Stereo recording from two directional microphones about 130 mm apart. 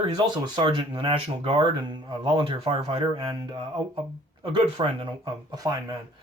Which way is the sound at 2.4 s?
45° right (ahead or behind).